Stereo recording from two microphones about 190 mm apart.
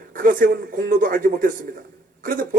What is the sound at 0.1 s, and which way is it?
A man's voice, 45° right (ahead or behind).